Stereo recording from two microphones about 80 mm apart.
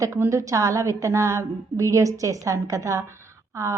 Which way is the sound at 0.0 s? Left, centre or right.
Right.